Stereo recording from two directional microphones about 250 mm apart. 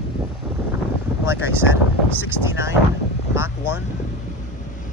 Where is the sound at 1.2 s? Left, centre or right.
Centre.